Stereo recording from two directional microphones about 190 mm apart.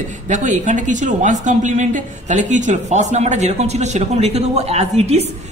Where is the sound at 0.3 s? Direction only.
40° right (ahead or behind).